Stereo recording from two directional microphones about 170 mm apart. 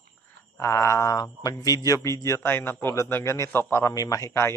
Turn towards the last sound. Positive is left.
turn(degrees=15)  # may be behind; listen again after turning